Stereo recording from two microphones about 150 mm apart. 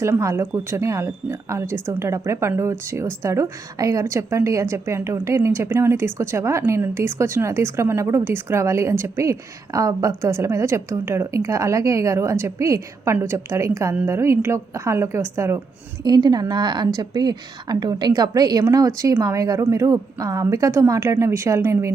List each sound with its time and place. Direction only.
0.0 s speech: 20° right (ahead or behind)
16.0 s speech: 30° right (ahead or behind)